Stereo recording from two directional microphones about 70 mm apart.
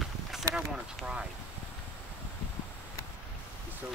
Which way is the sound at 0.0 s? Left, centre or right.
Centre.